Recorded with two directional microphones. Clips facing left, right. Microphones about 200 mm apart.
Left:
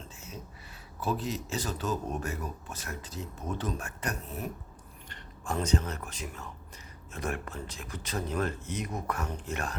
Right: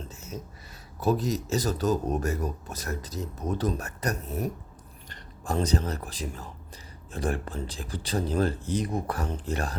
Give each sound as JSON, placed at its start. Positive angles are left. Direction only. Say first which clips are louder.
{"t": 0.9, "sound": "speech", "louder": "right 6 dB", "side_deg": -40}